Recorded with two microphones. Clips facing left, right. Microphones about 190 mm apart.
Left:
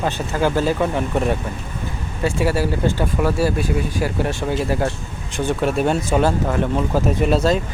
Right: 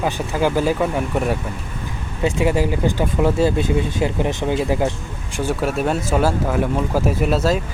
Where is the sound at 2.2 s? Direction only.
20° right (ahead or behind).